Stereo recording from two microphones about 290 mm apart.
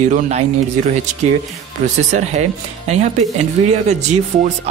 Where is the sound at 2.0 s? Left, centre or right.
Right.